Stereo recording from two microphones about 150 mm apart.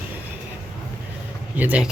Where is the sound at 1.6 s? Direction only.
10° right (ahead or behind).